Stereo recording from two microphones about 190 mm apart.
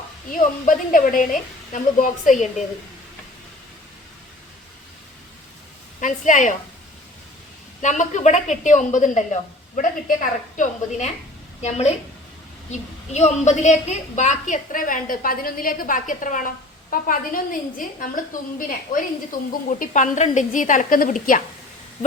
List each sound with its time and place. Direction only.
0.3 s a woman's voice: 45° left (ahead or behind)
6.0 s a woman's voice: 40° left (ahead or behind)
7.8 s a woman's voice: 40° left (ahead or behind)
13.1 s a woman's voice: 35° left (ahead or behind)
19.3 s a woman's voice: 45° left (ahead or behind)